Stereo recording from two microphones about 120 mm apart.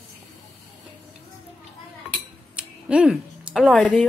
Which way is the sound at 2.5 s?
10° right (ahead or behind).